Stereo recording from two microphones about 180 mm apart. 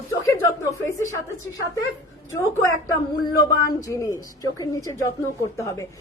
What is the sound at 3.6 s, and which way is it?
A woman's voice, 20° left (ahead or behind).